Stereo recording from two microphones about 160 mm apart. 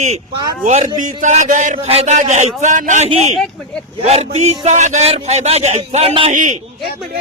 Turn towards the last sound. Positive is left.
turn(degrees=-50)  # may be behind; listen again after turning